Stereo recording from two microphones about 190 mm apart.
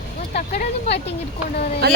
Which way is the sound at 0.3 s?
35° left (ahead or behind).